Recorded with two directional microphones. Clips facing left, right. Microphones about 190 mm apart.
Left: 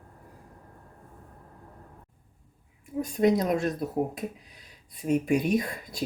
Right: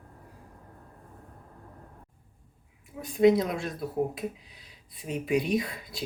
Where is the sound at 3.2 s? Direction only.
45° left (ahead or behind).